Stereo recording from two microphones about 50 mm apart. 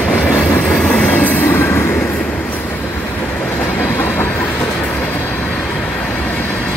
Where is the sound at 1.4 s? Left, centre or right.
Left.